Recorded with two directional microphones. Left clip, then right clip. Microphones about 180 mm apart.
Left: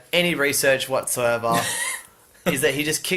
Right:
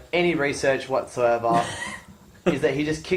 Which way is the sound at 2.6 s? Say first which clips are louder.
Left 2 dB; 45° left (ahead or behind).